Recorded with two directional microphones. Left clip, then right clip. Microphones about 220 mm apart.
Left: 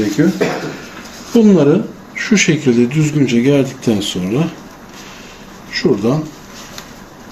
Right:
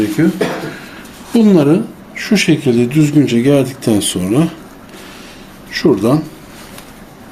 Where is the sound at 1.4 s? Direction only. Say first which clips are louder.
Even; 50° right (ahead or behind).